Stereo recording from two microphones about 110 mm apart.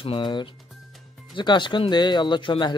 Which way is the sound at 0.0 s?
50° left (ahead or behind).